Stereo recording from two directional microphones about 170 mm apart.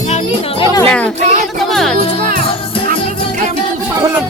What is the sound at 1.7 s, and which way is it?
Music, centre (ahead or behind).